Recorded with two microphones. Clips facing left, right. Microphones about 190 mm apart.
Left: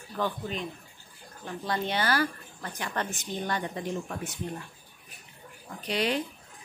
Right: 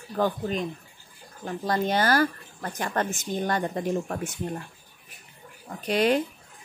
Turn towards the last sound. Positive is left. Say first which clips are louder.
# right 6 dB
turn(degrees=-50)  # may be behind; listen again after turning